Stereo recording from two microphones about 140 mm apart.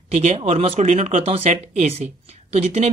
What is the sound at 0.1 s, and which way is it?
Speech, 50° right (ahead or behind).